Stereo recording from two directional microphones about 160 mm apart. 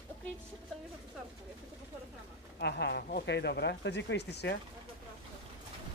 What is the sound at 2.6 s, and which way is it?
Speech, 90° left.